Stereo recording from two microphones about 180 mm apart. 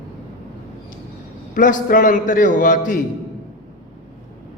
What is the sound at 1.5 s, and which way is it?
A man's voice, 45° left (ahead or behind).